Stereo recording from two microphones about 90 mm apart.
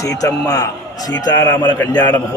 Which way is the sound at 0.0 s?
40° left (ahead or behind).